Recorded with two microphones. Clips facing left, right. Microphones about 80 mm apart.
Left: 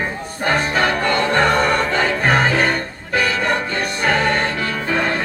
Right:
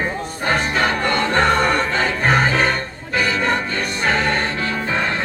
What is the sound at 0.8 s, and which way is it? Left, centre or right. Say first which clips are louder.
Music: left 1 dB; right.